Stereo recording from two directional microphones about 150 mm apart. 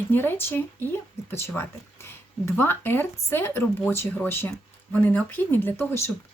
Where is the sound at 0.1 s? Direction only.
15° left (ahead or behind).